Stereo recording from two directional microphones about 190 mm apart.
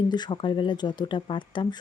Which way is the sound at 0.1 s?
25° left (ahead or behind).